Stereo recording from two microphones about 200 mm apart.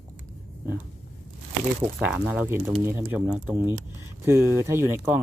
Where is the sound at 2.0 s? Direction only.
10° right (ahead or behind).